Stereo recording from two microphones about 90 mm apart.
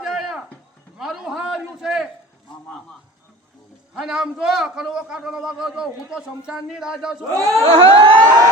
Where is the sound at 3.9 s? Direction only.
5° right (ahead or behind).